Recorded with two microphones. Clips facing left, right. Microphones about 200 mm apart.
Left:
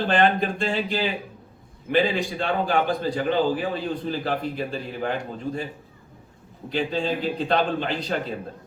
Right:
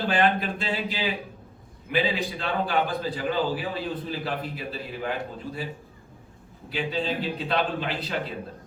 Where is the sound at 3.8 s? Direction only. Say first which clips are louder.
Left 4 dB; 45° left (ahead or behind).